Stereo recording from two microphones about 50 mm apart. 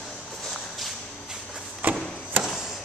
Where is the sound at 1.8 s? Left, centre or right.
Right.